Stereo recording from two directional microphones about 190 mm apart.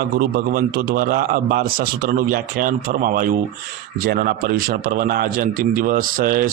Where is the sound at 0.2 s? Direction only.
50° right (ahead or behind).